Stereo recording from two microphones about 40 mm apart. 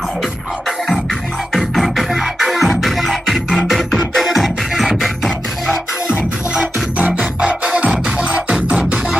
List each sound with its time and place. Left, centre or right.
1.5 s music: centre
7.3 s music: right